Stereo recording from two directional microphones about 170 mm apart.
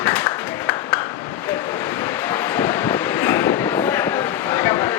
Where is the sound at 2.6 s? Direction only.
10° left (ahead or behind).